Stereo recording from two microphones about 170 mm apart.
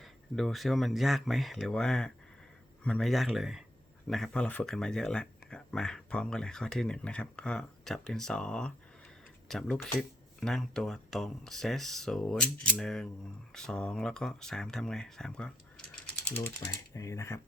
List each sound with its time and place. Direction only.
0.0 s speech: centre (ahead or behind)
16.0 s ratchet: 10° left (ahead or behind)
16.6 s speech: 20° left (ahead or behind)